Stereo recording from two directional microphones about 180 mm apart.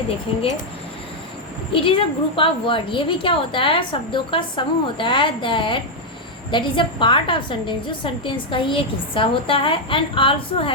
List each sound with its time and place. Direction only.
1.7 s a woman's voice: 30° left (ahead or behind)